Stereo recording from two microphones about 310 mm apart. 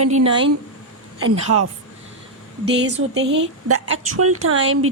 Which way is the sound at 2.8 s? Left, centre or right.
Right.